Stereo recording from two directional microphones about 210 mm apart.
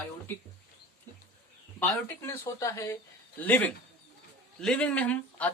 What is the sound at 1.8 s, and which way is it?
Speech, 10° left (ahead or behind).